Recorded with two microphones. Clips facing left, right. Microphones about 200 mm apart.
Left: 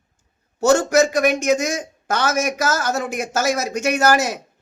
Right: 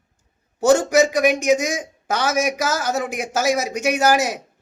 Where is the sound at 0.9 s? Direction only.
15° right (ahead or behind).